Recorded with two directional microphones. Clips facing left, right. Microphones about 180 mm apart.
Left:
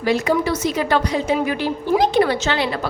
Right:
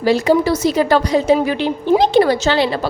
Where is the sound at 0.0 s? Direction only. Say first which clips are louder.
Right 5 dB; 35° right (ahead or behind).